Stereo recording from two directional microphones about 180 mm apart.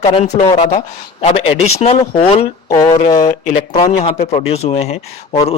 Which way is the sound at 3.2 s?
40° left (ahead or behind).